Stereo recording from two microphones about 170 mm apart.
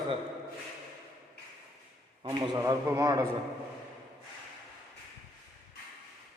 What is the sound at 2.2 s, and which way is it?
Speech, 30° right (ahead or behind).